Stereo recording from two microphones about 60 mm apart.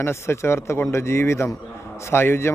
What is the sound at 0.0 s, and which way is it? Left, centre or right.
A man's voice, left.